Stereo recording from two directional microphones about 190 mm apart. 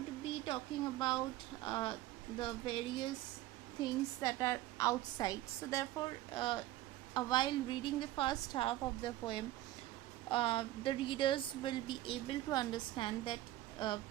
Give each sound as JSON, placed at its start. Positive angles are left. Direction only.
{"t": 0.3, "sound": "speech", "side_deg": 25}